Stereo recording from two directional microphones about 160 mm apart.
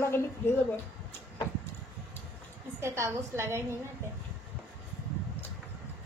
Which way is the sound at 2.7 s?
15° right (ahead or behind).